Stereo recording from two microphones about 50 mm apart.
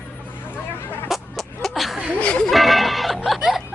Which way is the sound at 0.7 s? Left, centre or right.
Left.